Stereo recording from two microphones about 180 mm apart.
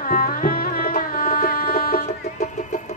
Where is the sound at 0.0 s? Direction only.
50° left (ahead or behind).